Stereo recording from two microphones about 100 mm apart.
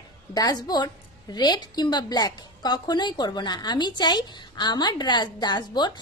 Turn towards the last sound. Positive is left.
turn(degrees=45)  # may be behind; listen again after turning